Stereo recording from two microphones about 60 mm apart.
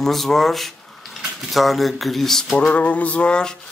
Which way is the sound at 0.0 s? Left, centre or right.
Centre.